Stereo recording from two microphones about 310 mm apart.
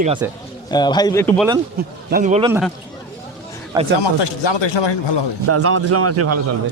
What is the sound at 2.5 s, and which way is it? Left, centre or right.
Speech, centre.